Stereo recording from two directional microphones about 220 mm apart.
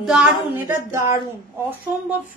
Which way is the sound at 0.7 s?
15° right (ahead or behind).